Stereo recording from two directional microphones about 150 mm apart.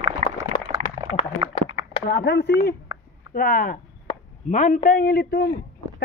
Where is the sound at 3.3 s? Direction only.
65° left (ahead or behind).